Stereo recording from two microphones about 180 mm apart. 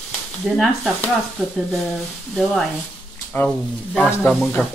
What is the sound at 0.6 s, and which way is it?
Speech, centre (ahead or behind).